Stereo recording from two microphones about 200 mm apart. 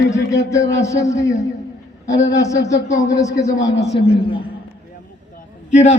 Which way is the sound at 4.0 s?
30° left (ahead or behind).